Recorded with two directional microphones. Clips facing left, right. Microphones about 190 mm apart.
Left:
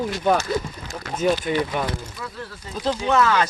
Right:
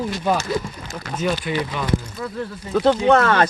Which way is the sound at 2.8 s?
60° right (ahead or behind).